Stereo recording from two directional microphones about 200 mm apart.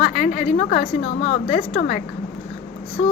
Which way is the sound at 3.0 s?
30° left (ahead or behind).